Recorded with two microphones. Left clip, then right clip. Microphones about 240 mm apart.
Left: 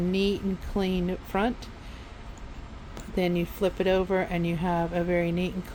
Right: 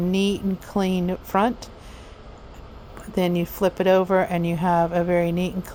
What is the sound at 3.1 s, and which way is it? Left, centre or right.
Speech, right.